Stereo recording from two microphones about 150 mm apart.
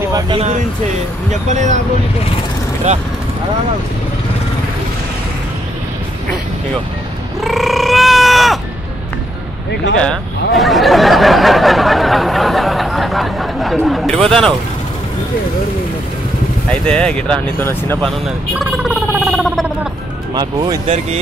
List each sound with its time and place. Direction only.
1.5 s speech: 50° right (ahead or behind)
7.3 s a sound: centre (ahead or behind)
9.9 s speech: centre (ahead or behind)
16.8 s speech: 5° left (ahead or behind)
18.9 s a sound: 5° right (ahead or behind)
20.3 s speech: 30° right (ahead or behind)
20.8 s speech: 45° right (ahead or behind)